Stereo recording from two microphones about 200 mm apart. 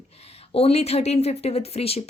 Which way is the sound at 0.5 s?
30° left (ahead or behind).